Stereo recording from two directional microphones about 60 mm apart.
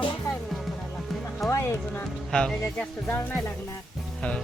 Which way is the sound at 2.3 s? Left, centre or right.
Centre.